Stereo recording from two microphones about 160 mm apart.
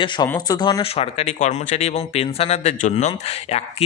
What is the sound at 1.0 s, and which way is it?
Speech, 40° left (ahead or behind).